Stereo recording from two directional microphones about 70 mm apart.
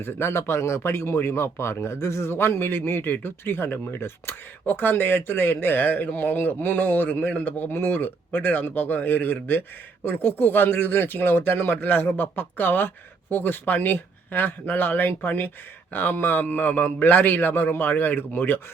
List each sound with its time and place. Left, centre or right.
0.0 s speech: left